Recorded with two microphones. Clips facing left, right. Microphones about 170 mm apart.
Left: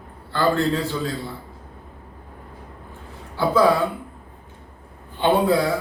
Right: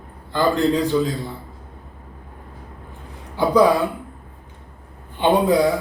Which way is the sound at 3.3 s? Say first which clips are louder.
Right 3 dB; 15° right (ahead or behind).